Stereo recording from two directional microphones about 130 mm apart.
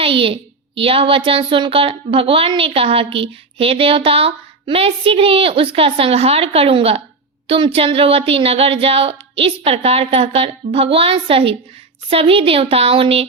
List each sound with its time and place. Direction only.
0.0 s a woman's voice: 45° right (ahead or behind)